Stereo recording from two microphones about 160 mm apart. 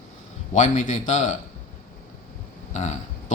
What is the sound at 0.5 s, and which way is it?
Speech, 50° left (ahead or behind).